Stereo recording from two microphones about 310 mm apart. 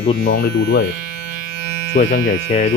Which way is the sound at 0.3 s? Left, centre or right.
Left.